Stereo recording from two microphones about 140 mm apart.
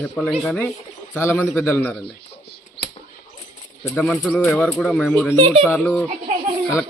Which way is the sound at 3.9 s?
5° left (ahead or behind).